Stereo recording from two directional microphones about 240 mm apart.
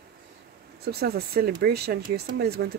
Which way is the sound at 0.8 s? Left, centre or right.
Right.